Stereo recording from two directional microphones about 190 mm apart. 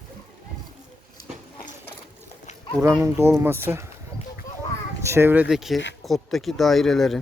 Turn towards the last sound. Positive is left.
turn(degrees=0)  # may be behind; listen again after turning